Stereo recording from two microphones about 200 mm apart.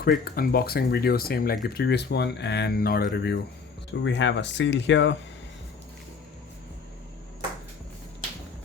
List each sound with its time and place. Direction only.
0.0 s speech: 50° left (ahead or behind); by 5.1 s 65° left (ahead or behind)